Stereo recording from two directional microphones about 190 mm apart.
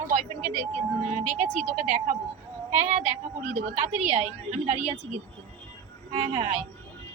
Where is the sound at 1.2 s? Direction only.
40° right (ahead or behind).